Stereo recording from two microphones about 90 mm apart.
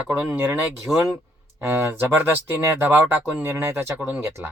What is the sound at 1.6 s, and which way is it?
Speech, 25° right (ahead or behind).